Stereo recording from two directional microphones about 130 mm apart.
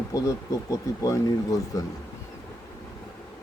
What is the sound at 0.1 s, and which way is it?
Speech, 25° left (ahead or behind).